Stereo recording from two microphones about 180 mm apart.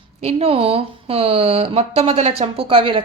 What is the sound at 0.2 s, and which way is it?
Speech, 35° right (ahead or behind).